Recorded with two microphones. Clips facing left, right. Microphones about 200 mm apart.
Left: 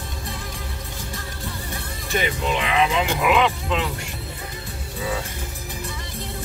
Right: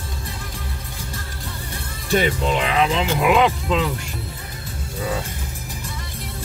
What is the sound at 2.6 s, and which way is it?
Speech, 40° right (ahead or behind).